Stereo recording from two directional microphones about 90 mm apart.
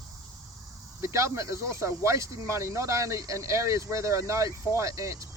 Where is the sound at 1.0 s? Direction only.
35° right (ahead or behind).